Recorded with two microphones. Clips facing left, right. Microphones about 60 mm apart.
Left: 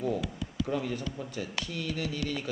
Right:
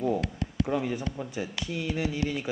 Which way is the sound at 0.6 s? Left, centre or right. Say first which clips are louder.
Right 3 dB; centre.